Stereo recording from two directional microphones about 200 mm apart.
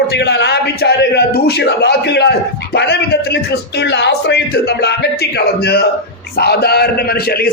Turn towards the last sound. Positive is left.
turn(degrees=50)  # may be behind; listen again after turning